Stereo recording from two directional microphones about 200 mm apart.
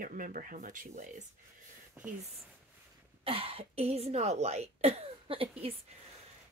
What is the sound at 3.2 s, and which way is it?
Speech, 30° right (ahead or behind).